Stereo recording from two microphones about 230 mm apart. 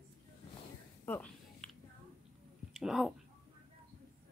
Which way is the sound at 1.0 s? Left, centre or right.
Centre.